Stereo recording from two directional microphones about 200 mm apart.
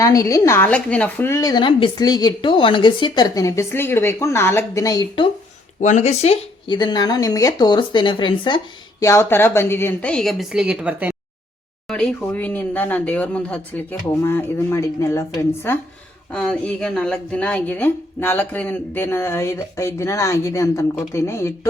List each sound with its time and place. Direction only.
0.0 s a woman's voice: 15° left (ahead or behind)
5.8 s speech: 35° left (ahead or behind); by 11.2 s 5° right (ahead or behind)
11.9 s a woman's voice: 5° left (ahead or behind)